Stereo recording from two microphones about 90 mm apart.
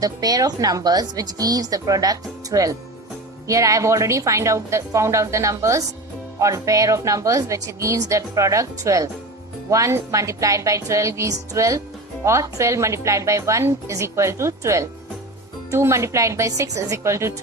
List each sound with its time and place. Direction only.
0.0 s a woman's voice: 45° right (ahead or behind)